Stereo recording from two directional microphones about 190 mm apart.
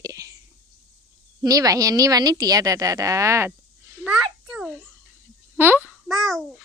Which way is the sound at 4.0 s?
5° right (ahead or behind).